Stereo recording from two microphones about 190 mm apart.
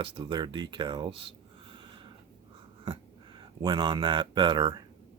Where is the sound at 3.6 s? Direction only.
25° right (ahead or behind).